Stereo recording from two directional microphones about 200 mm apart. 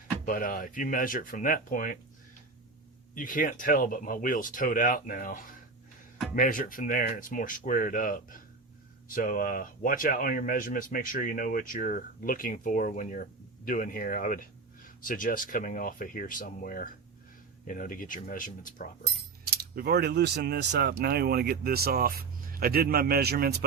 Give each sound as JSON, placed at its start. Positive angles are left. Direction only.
{"t": 0.3, "sound": "speech", "side_deg": 45}
{"t": 3.2, "sound": "speech", "side_deg": 45}
{"t": 19.5, "sound": "speech", "side_deg": -50}